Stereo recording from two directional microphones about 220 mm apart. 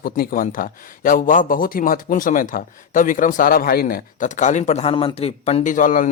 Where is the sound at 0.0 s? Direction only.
40° left (ahead or behind).